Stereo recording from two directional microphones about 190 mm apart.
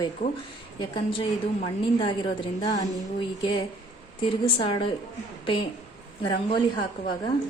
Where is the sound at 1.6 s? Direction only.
30° left (ahead or behind).